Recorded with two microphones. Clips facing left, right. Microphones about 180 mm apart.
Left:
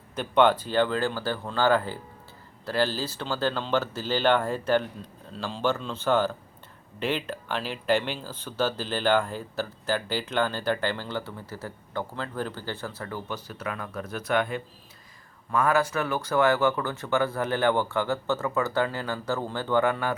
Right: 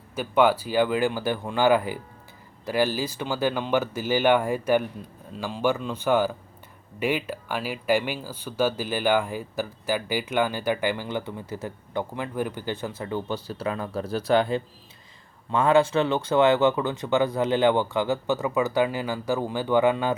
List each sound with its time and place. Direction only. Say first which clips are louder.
0.2 s speech: right 1 dB; 10° right (ahead or behind)